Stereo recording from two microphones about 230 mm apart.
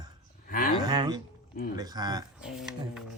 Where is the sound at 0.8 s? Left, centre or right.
Centre.